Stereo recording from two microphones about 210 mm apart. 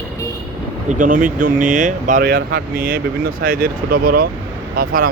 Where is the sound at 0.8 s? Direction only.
40° right (ahead or behind).